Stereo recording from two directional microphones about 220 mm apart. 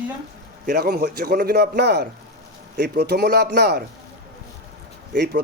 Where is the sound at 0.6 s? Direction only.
45° right (ahead or behind).